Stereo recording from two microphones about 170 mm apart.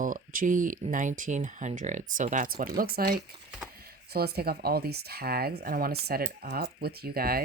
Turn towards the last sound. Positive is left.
turn(degrees=-60)  # may be behind; listen again after turning